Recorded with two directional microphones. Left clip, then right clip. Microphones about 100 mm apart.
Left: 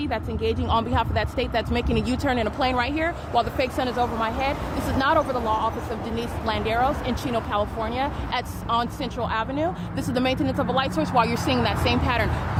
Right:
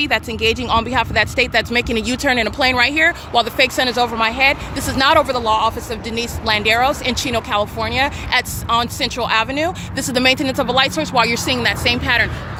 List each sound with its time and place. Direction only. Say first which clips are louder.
0.0 s speech: right 9 dB; 45° right (ahead or behind)
0.7 s speech: right 6 dB; 25° right (ahead or behind)
4.0 s speech: right 11 dB; 45° right (ahead or behind)
5.9 s speech: right 6 dB; 35° right (ahead or behind)
9.9 s speech: right 9 dB; 30° right (ahead or behind)
11.0 s speech: right 5 dB; 10° right (ahead or behind)